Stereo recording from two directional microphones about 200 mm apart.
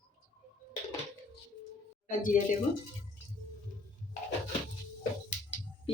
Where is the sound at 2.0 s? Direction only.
40° left (ahead or behind).